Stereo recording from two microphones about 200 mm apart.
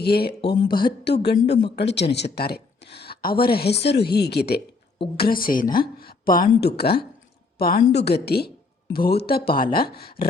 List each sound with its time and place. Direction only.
0.0 s a woman's voice: 55° left (ahead or behind)
0.4 s speech: 20° left (ahead or behind)
0.9 s a woman's voice: 55° left (ahead or behind)